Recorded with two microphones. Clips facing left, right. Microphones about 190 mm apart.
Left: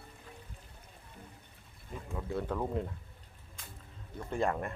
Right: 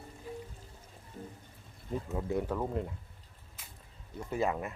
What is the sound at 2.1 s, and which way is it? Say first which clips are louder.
Speech: right 2 dB; 20° right (ahead or behind).